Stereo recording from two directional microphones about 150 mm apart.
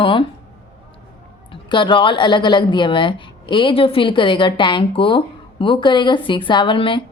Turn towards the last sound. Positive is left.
turn(degrees=35)  # may be behind; listen again after turning